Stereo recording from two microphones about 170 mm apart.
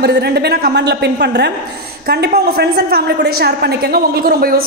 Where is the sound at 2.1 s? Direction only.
65° right (ahead or behind).